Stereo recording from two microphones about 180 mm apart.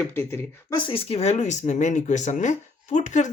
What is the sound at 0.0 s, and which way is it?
Speech, 10° left (ahead or behind).